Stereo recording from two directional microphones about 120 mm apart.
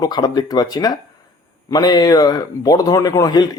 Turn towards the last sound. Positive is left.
turn(degrees=30)  # may be behind; listen again after turning